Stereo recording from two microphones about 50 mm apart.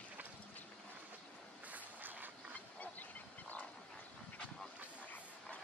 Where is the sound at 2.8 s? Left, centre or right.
Left.